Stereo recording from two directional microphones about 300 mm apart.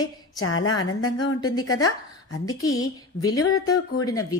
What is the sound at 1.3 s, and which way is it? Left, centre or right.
Speech, centre.